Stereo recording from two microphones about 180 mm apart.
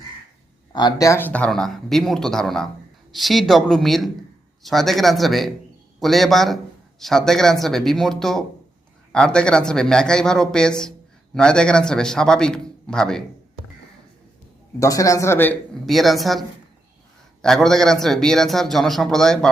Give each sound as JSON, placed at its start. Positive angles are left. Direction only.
{"t": 0.7, "sound": "a man's voice", "side_deg": 25}
{"t": 14.8, "sound": "speech", "side_deg": 20}
{"t": 15.9, "sound": "a man's voice", "side_deg": 0}
{"t": 17.4, "sound": "a man's voice", "side_deg": 0}